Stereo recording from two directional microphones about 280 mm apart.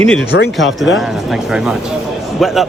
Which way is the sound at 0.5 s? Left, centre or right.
Centre.